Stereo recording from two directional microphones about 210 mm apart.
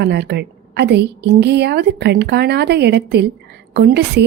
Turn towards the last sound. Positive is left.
turn(degrees=-50)  # may be behind; listen again after turning